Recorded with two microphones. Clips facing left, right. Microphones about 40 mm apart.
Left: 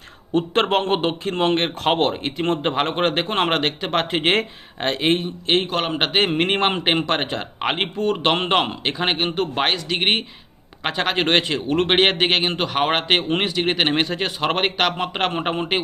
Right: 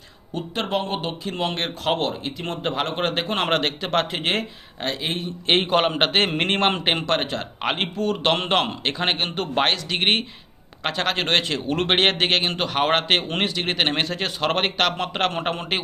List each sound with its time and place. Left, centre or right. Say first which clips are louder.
0.3 s speech: left 6 dB; left
2.6 s a man's voice: left 4 dB; left
4.2 s speech: left 5 dB; left
5.5 s a man's voice: right 2 dB; centre
5.9 s speech: left 1 dB; centre